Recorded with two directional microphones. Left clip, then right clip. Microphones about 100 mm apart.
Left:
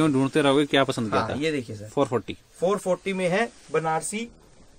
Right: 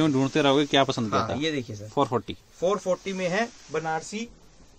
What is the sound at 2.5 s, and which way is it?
Speech, 45° left (ahead or behind).